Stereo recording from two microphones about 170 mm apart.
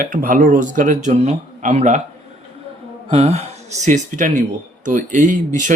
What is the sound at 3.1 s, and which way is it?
Speech, 35° right (ahead or behind).